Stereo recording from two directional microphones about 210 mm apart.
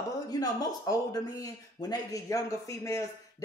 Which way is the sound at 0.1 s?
15° left (ahead or behind).